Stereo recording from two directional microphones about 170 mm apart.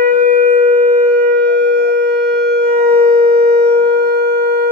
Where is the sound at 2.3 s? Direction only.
60° right (ahead or behind).